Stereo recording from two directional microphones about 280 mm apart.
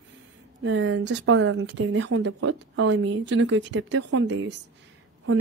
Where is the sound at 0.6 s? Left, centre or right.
Right.